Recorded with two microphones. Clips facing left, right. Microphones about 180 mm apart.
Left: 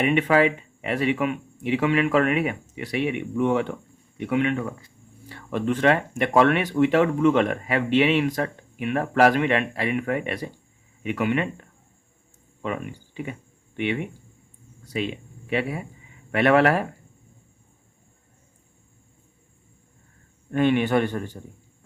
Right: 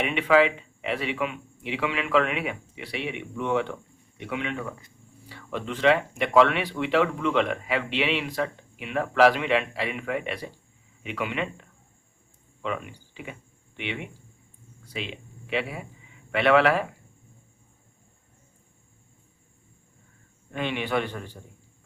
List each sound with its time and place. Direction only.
0.0 s speech: 45° left (ahead or behind)
12.6 s speech: 50° left (ahead or behind)
20.5 s speech: 50° left (ahead or behind)